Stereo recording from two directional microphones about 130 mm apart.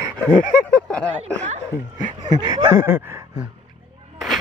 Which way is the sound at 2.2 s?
30° right (ahead or behind).